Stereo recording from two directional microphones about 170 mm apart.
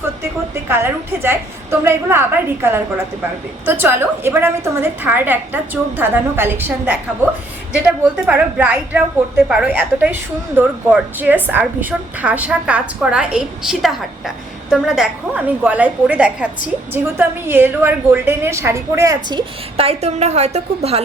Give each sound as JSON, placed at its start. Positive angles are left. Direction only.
{"t": 0.7, "sound": "a woman's voice", "side_deg": -15}